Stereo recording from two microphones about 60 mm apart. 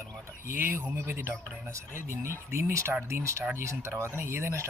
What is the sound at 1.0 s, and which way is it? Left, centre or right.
Speech, right.